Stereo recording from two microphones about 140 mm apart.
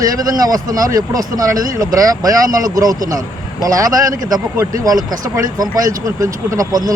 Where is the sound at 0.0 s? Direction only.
25° right (ahead or behind).